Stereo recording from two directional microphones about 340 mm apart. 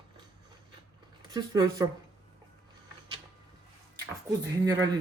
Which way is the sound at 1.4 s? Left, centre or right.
Centre.